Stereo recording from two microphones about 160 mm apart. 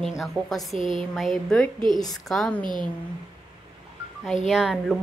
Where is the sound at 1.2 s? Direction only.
Centre (ahead or behind).